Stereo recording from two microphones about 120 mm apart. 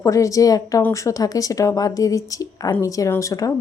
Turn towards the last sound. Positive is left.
turn(degrees=30)  # may be behind; listen again after turning